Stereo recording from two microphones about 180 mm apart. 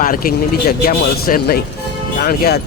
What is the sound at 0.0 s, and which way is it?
A man's voice, 50° left (ahead or behind).